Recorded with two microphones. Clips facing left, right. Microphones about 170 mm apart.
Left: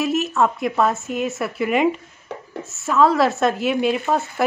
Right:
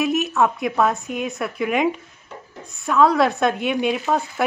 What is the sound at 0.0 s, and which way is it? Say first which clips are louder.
A woman's voice: even; centre (ahead or behind).